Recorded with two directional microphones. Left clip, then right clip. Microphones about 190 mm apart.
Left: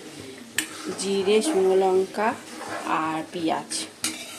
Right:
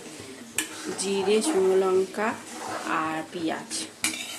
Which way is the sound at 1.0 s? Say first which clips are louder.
Left 2 dB; 10° left (ahead or behind).